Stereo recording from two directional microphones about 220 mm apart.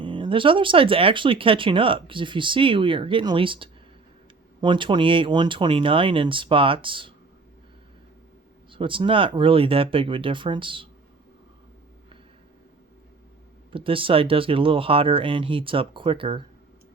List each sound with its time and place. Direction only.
0.0 s speech: 20° right (ahead or behind)
8.7 s speech: 20° right (ahead or behind)
13.7 s speech: 25° right (ahead or behind)